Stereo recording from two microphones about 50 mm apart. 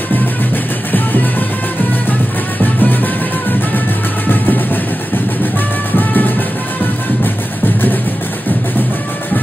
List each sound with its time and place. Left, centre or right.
2.6 s music: left
5.9 s music: left